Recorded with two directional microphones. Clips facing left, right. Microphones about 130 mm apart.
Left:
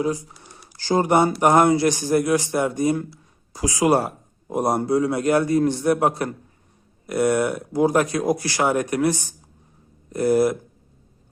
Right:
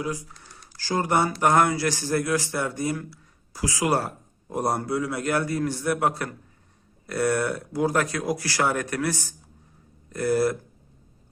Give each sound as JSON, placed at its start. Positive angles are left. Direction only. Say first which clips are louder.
{"t": 0.0, "sound": "a man's voice", "louder": "left 6 dB", "side_deg": 25}
{"t": 0.3, "sound": "a sound", "louder": "left 2 dB", "side_deg": 15}
{"t": 1.4, "sound": "a man's voice", "louder": "left 5 dB", "side_deg": 20}